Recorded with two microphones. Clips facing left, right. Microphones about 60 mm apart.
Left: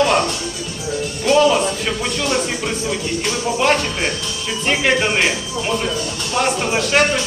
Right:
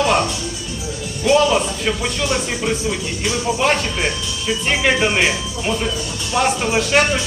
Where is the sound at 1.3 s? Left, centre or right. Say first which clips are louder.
Left 1 dB; centre.